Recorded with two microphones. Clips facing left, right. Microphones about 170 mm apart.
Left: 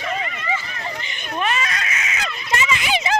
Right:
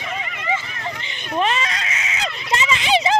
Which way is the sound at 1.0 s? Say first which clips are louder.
Right 4 dB; 25° right (ahead or behind).